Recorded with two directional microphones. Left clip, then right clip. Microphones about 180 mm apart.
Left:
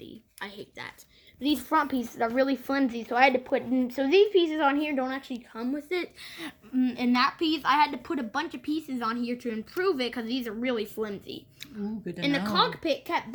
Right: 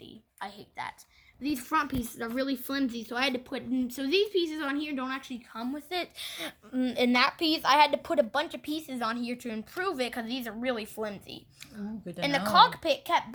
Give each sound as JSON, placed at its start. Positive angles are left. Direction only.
{"t": 0.0, "sound": "a sound", "side_deg": -20}
{"t": 2.1, "sound": "speech", "side_deg": -50}
{"t": 12.2, "sound": "a woman's voice", "side_deg": -55}